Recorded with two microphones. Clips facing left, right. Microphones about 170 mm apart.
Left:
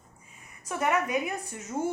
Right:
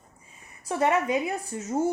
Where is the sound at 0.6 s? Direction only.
30° right (ahead or behind).